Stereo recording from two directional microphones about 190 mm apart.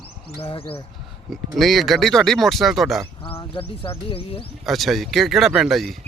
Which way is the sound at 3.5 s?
30° left (ahead or behind).